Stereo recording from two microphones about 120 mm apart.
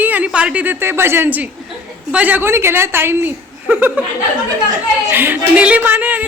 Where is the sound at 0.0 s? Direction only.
15° right (ahead or behind).